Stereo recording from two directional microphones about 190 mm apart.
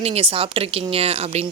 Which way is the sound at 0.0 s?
30° right (ahead or behind).